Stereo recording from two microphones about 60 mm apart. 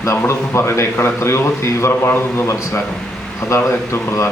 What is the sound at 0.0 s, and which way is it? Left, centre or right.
A man's voice, left.